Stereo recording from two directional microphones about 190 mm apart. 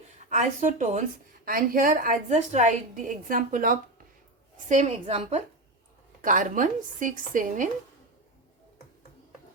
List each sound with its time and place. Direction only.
0.2 s a woman's voice: 40° right (ahead or behind)